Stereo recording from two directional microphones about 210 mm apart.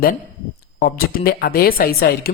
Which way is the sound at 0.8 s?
45° left (ahead or behind).